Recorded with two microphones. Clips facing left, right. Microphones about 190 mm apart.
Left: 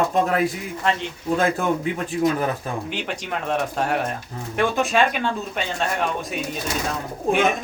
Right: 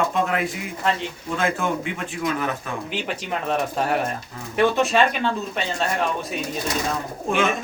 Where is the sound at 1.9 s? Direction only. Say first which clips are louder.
Left 5 dB; 35° left (ahead or behind).